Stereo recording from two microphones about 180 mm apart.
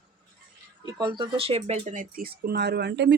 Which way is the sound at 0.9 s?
25° right (ahead or behind).